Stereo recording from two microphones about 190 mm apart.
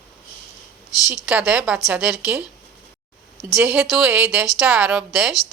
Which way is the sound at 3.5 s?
10° right (ahead or behind).